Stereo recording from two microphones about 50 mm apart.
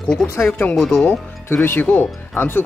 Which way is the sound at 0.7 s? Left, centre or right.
Centre.